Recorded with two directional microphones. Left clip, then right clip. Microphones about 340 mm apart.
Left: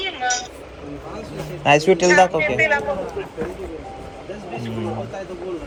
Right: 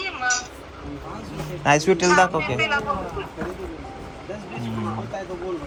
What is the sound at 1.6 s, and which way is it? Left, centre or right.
A woman's voice, centre.